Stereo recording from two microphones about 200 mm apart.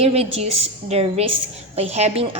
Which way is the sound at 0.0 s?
30° right (ahead or behind).